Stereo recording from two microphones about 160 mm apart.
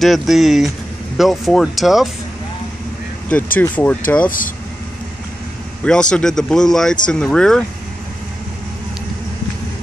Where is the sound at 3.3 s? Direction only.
10° left (ahead or behind).